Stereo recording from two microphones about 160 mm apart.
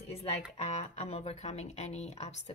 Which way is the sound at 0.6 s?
40° left (ahead or behind).